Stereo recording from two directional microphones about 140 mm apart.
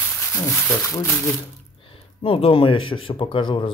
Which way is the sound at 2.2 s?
40° left (ahead or behind).